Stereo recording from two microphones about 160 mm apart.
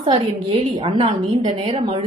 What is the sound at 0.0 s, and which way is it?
A woman's voice, 40° right (ahead or behind).